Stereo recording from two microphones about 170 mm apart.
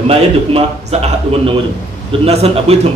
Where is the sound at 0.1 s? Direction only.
35° right (ahead or behind).